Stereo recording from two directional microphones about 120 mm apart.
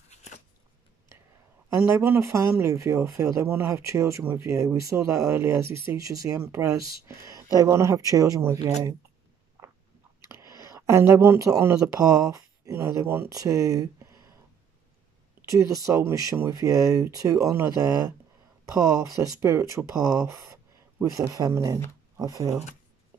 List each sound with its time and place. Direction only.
0.1 s a sound: 70° left (ahead or behind)
1.8 s speech: 20° right (ahead or behind)
10.2 s whispering: 25° right (ahead or behind)
10.9 s speech: 20° right (ahead or behind)
15.4 s speech: 25° right (ahead or behind)